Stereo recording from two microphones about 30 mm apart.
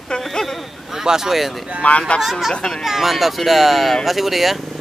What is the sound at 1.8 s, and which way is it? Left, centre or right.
Speech, left.